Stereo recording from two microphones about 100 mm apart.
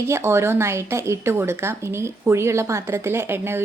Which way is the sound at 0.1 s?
25° right (ahead or behind).